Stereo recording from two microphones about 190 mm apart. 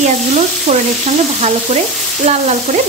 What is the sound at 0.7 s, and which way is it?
A woman's voice, 35° right (ahead or behind).